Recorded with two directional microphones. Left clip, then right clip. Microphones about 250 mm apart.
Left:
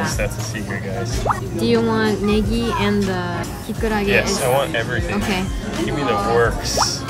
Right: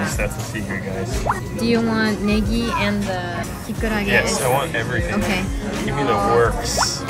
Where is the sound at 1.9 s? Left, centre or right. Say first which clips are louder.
Left 2 dB; left.